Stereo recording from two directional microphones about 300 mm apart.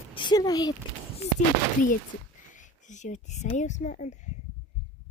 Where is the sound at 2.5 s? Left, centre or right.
Left.